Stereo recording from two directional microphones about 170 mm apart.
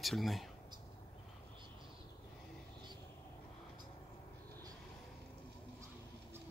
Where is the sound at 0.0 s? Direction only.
Centre (ahead or behind).